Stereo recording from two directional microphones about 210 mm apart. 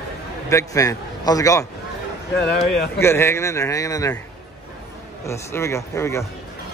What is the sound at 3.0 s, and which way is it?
A man's voice, 10° left (ahead or behind).